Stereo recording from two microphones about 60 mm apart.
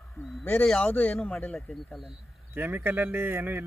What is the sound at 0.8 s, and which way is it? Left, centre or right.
Speech, left.